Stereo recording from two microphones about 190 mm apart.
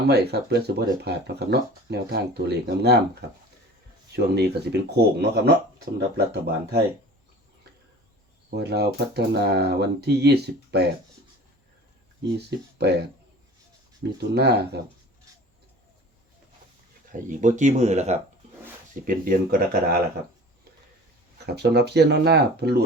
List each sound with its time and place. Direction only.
0.1 s speech: 60° right (ahead or behind)
8.4 s speech: 60° right (ahead or behind)
12.5 s speech: 60° right (ahead or behind)
17.1 s speech: 40° right (ahead or behind)
19.0 s speech: 50° right (ahead or behind)
21.3 s speech: 60° right (ahead or behind)